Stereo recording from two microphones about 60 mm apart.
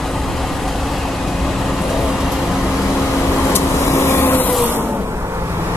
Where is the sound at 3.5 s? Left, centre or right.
Left.